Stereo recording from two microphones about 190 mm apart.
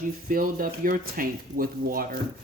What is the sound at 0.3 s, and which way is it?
Speech, 50° right (ahead or behind).